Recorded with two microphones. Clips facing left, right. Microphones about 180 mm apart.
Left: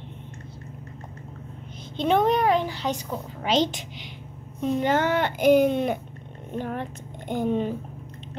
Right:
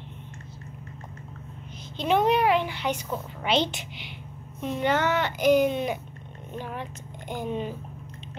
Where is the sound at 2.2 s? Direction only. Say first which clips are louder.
Right 1 dB; 45° left (ahead or behind).